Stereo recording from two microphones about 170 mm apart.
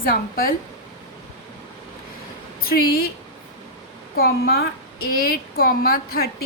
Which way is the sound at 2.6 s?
65° left (ahead or behind).